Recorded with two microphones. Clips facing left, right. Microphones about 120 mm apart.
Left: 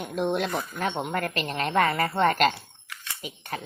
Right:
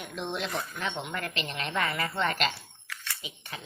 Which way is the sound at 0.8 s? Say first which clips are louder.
Left 6 dB; 45° left (ahead or behind).